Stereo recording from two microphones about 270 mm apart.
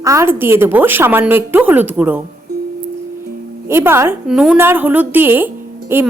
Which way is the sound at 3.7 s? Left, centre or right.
Centre.